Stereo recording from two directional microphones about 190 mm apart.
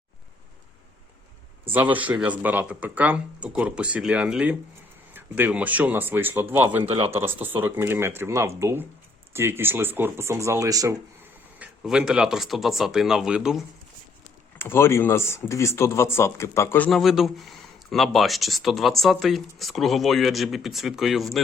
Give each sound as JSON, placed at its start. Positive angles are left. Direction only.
{"t": 1.7, "sound": "speech", "side_deg": -10}
{"t": 6.8, "sound": "speech", "side_deg": -30}
{"t": 7.1, "sound": "speech", "side_deg": -10}
{"t": 11.6, "sound": "speech", "side_deg": -5}
{"t": 14.6, "sound": "speech", "side_deg": 10}